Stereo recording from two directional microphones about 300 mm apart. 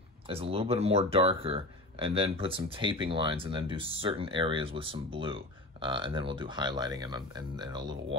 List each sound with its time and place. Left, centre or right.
0.3 s speech: centre